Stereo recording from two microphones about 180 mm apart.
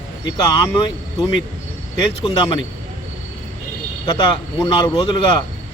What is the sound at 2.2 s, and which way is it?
Speech, 30° left (ahead or behind).